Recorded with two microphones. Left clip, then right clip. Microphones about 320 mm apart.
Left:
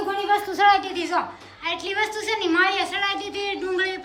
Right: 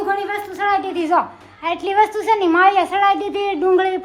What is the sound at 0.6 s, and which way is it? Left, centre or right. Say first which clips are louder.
A woman's voice: right 2 dB; centre.